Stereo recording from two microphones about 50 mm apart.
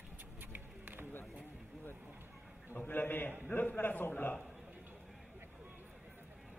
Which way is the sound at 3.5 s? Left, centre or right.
Left.